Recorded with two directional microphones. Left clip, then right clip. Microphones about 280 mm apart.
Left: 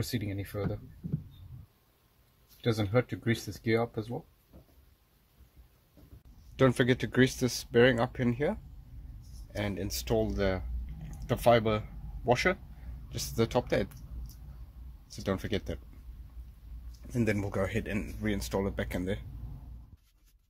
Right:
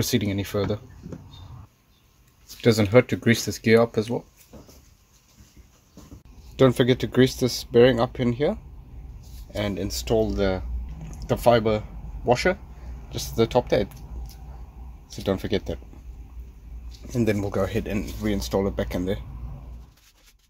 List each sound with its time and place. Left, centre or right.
0.0 s speech: centre
2.6 s speech: right
6.5 s speech: centre
15.2 s speech: centre
17.1 s speech: centre